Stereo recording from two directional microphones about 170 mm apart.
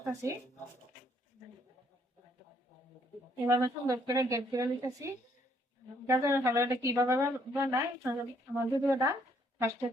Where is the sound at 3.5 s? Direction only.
20° right (ahead or behind).